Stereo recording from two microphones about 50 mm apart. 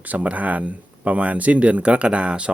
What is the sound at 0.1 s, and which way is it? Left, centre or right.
Speech, right.